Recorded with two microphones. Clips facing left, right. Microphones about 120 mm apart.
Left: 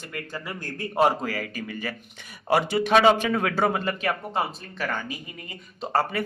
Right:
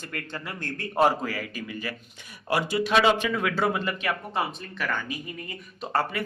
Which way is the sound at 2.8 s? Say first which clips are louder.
Left 2 dB; 45° left (ahead or behind).